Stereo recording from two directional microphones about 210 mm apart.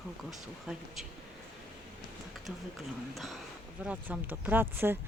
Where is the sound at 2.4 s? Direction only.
Centre (ahead or behind).